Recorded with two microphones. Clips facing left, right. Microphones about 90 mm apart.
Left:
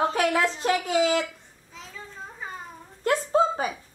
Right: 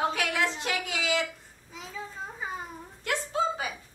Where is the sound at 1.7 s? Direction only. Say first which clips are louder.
Right 3 dB; 5° right (ahead or behind).